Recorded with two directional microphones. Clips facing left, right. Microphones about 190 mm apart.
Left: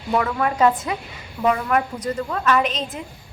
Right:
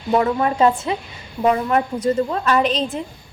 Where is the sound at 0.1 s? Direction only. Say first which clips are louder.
Right 4 dB; 25° right (ahead or behind).